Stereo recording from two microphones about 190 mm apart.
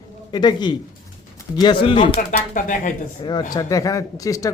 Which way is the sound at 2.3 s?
45° left (ahead or behind).